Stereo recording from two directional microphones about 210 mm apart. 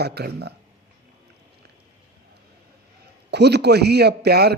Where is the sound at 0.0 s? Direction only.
50° right (ahead or behind).